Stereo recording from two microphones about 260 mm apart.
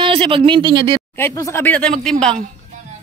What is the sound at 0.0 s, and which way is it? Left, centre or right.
Speech, right.